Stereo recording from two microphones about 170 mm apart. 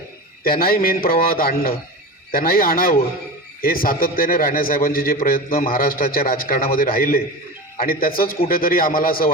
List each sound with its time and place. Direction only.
0.4 s a man's voice: 60° left (ahead or behind)